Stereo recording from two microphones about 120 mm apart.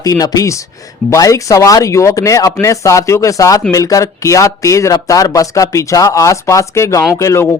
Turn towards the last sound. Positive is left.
turn(degrees=25)  # may be behind; listen again after turning